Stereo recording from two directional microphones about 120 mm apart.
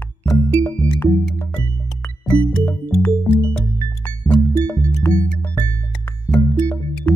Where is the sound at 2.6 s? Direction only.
15° left (ahead or behind).